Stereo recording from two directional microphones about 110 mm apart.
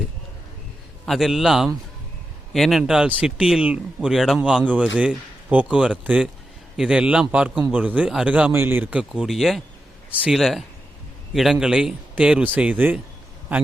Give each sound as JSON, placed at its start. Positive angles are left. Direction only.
{"t": 1.0, "sound": "a man's voice", "side_deg": 0}